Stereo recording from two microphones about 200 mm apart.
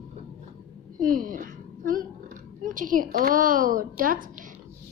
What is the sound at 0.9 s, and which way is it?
A woman's voice, 45° right (ahead or behind).